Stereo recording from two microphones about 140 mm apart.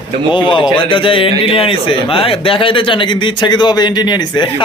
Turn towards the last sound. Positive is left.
turn(degrees=30)  # may be behind; listen again after turning